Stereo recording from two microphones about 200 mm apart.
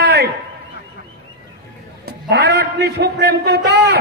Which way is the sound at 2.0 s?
55° right (ahead or behind).